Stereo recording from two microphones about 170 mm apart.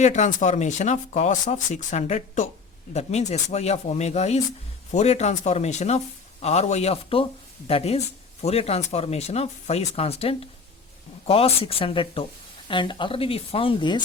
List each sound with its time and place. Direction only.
0.0 s speech: 45° left (ahead or behind); by 14.0 s 30° left (ahead or behind)